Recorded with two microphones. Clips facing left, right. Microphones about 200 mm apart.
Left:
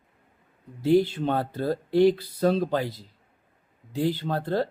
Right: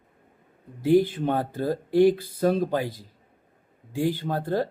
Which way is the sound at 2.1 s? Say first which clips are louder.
Right 1 dB; 50° right (ahead or behind).